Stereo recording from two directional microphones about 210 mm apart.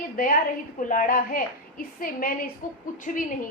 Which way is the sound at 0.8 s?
40° left (ahead or behind).